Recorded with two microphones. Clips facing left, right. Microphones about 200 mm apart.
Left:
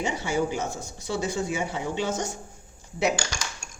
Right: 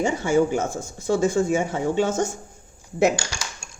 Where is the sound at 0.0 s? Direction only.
50° right (ahead or behind).